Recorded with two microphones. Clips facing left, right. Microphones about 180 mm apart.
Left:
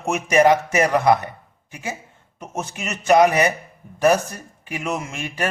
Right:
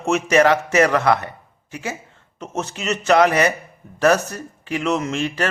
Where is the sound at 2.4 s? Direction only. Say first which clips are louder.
Right 3 dB; 15° left (ahead or behind).